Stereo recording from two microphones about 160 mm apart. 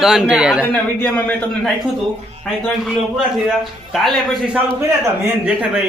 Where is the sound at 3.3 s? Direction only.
Centre (ahead or behind).